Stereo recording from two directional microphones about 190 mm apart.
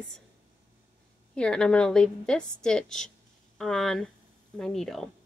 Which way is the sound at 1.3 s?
5° left (ahead or behind).